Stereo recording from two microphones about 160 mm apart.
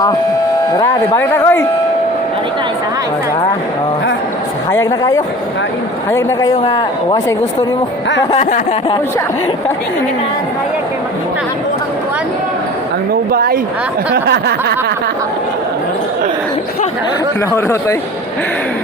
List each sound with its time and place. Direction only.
0.7 s speech: 25° left (ahead or behind)
4.7 s speech: 20° left (ahead or behind)
8.4 s a sound: 50° left (ahead or behind)
13.3 s a woman's voice: 70° right (ahead or behind)
14.1 s a sound: 90° right
17.5 s speech: 15° left (ahead or behind)